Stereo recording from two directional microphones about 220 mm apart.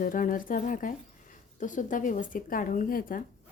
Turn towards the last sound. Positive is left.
turn(degrees=40)  # may be behind; listen again after turning